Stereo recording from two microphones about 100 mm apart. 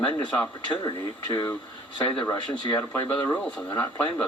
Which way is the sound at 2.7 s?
20° left (ahead or behind).